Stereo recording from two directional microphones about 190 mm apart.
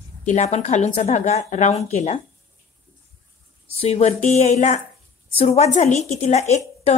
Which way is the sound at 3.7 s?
35° left (ahead or behind).